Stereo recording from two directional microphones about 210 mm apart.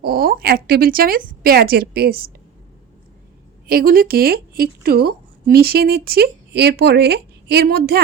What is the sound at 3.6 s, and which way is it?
A woman's voice, 45° right (ahead or behind).